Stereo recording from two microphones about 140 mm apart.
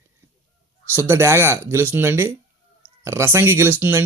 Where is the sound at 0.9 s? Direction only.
15° right (ahead or behind).